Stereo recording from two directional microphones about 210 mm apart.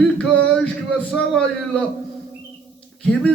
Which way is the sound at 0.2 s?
5° left (ahead or behind).